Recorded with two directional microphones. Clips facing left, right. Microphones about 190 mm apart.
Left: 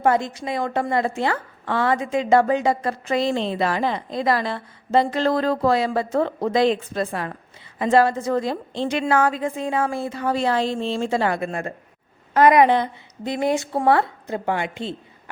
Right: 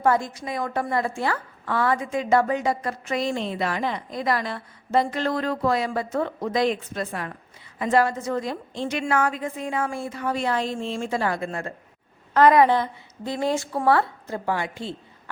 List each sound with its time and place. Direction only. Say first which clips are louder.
0.0 s a woman's voice: left 2 dB; 20° left (ahead or behind)
11.4 s a woman's voice: left 3 dB; 15° left (ahead or behind)